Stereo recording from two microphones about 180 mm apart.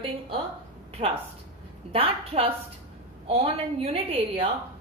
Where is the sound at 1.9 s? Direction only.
30° right (ahead or behind).